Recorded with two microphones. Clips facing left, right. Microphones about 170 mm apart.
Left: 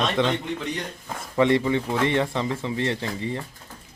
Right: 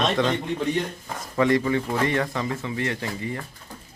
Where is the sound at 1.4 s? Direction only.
25° left (ahead or behind).